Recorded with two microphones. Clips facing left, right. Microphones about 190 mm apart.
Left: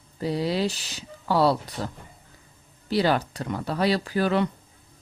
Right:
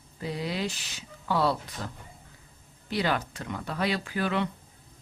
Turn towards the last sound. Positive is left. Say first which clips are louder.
# left 6 dB
turn(degrees=35)  # may be behind; listen again after turning